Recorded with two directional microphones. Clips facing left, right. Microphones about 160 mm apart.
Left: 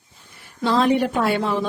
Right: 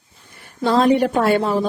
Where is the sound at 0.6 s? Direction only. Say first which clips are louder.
Right 3 dB; 45° right (ahead or behind).